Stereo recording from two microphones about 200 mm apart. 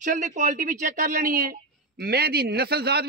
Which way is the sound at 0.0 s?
40° right (ahead or behind).